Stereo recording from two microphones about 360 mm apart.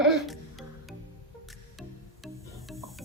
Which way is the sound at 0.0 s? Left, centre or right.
Centre.